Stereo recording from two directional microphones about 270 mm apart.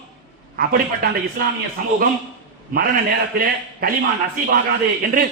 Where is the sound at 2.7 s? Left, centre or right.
Right.